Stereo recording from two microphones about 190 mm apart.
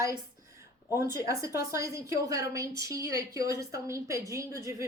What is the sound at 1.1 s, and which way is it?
A woman's voice, 15° right (ahead or behind).